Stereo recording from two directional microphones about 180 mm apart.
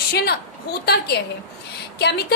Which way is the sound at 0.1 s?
60° left (ahead or behind).